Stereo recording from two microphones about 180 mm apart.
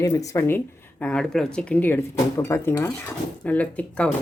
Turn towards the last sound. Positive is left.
turn(degrees=10)  # may be behind; listen again after turning